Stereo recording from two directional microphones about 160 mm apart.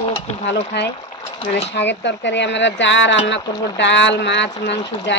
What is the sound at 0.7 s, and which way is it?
Speech, 90° left.